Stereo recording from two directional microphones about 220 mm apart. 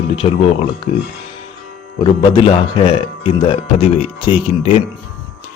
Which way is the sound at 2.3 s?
25° left (ahead or behind).